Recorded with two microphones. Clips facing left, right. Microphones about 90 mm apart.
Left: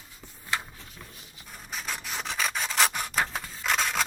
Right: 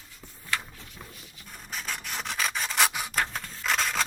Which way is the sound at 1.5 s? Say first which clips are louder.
Even; centre (ahead or behind).